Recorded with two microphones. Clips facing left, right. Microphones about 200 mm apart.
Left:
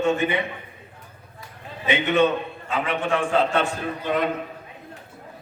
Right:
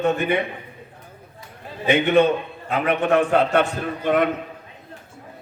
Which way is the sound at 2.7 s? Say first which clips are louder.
Right 5 dB; 60° right (ahead or behind).